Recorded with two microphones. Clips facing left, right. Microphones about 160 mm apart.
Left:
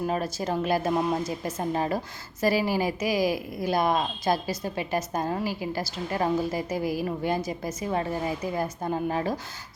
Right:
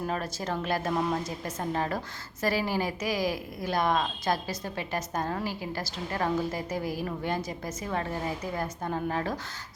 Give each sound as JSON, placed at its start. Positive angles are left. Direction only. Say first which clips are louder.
{"t": 0.1, "sound": "a woman's voice", "louder": "left 4 dB", "side_deg": 10}